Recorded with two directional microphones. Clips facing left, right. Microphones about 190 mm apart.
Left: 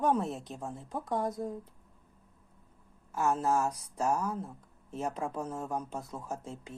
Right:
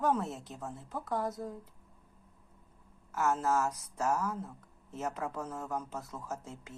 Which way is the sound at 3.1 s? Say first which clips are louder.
Left 1 dB; 15° left (ahead or behind).